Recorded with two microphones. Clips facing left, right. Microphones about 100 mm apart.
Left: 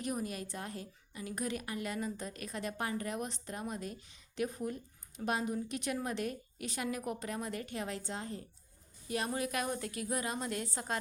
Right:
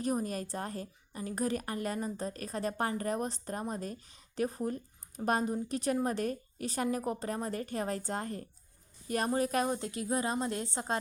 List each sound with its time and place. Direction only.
0.0 s a woman's voice: 35° right (ahead or behind)
9.6 s a woman's voice: 25° right (ahead or behind)